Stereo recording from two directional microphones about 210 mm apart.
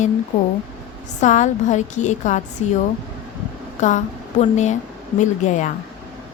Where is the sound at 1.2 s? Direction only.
35° left (ahead or behind).